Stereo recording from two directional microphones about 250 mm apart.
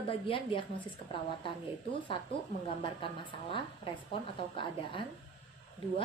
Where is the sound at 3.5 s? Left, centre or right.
Left.